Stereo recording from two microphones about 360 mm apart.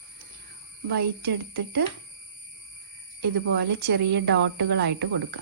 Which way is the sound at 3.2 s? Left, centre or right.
Right.